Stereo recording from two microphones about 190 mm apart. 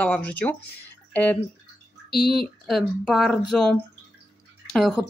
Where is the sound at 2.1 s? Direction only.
55° left (ahead or behind).